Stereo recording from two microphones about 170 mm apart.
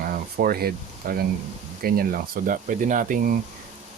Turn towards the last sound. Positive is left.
turn(degrees=-55)  # may be behind; listen again after turning